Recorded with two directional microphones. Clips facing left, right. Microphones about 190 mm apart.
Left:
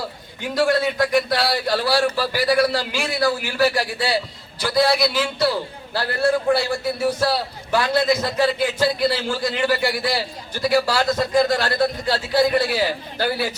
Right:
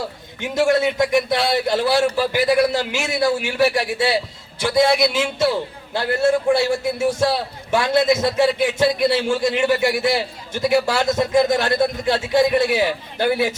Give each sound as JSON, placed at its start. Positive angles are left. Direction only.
{"t": 0.4, "sound": "a man's voice", "side_deg": -20}
{"t": 7.7, "sound": "a man's voice", "side_deg": -20}